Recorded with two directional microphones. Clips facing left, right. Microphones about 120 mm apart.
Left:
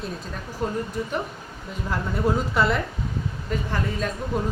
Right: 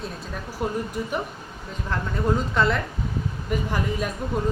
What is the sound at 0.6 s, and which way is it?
Speech, 10° right (ahead or behind).